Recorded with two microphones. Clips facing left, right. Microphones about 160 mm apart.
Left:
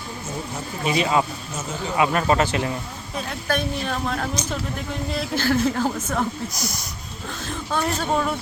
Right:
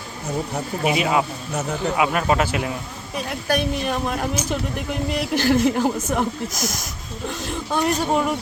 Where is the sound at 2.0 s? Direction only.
5° right (ahead or behind).